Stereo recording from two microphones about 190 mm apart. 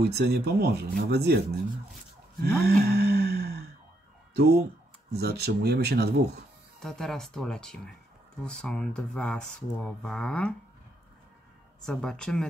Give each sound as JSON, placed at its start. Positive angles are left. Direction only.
{"t": 0.0, "sound": "speech", "side_deg": -60}
{"t": 2.4, "sound": "sigh", "side_deg": -60}
{"t": 5.1, "sound": "speech", "side_deg": -60}
{"t": 6.8, "sound": "speech", "side_deg": 0}
{"t": 11.8, "sound": "speech", "side_deg": 5}